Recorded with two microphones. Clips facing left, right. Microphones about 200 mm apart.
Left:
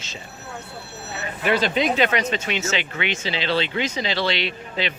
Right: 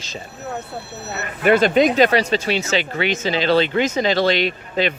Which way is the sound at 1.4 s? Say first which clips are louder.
Right 7 dB; 50° right (ahead or behind).